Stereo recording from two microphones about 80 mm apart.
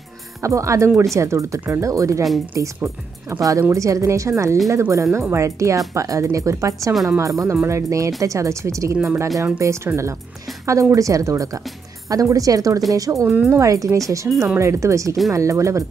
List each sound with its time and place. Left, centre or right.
0.4 s speech: right
14.3 s speech: centre
14.6 s speech: right